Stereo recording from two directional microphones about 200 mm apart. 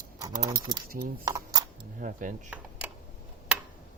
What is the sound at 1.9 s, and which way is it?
Speech, 45° right (ahead or behind).